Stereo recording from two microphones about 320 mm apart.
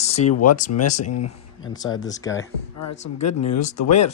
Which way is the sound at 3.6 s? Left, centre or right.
Left.